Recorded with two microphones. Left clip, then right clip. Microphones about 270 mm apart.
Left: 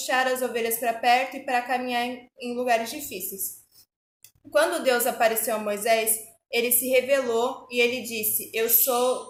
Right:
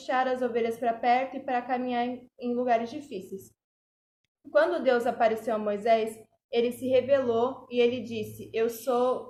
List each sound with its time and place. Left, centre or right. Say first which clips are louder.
0.0 s a woman's voice: left 3 dB; centre
4.5 s a woman's voice: left 2 dB; centre